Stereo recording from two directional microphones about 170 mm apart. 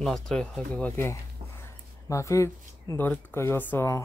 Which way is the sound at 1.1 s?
15° left (ahead or behind).